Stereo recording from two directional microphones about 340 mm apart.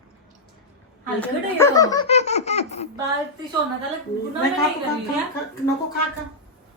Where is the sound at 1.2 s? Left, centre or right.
Centre.